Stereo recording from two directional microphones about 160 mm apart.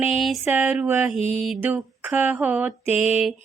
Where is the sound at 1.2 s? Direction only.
40° left (ahead or behind).